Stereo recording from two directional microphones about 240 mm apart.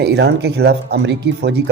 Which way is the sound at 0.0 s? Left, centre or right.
Right.